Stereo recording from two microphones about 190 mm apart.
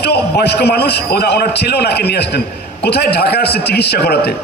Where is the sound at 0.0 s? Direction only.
60° left (ahead or behind).